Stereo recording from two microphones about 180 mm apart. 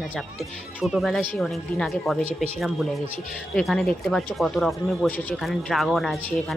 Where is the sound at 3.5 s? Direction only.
Centre (ahead or behind).